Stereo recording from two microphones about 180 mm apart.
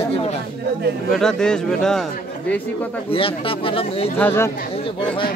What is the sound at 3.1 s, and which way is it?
Speech, 30° left (ahead or behind).